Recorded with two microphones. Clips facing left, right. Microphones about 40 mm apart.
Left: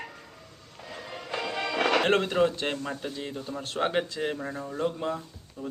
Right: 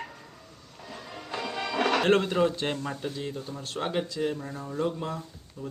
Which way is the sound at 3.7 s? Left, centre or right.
Left.